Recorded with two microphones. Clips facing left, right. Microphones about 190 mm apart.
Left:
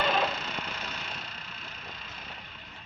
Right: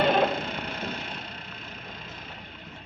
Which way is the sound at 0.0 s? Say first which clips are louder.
Right 6 dB; 55° right (ahead or behind).